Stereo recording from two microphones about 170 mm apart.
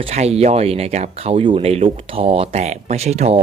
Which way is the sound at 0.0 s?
40° right (ahead or behind).